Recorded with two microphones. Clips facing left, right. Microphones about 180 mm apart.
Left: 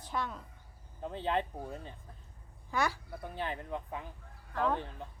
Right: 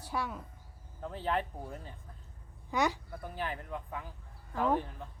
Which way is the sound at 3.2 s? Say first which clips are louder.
Left 1 dB; 20° left (ahead or behind).